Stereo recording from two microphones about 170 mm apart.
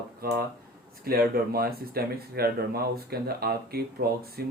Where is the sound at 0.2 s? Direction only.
65° right (ahead or behind).